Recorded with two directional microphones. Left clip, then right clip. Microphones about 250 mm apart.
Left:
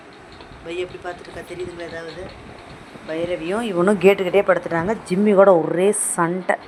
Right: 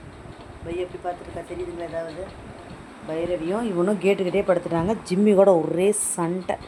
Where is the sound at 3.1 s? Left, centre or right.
Centre.